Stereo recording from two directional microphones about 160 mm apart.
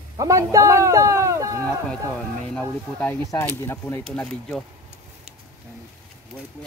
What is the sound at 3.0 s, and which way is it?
Speech, 15° left (ahead or behind).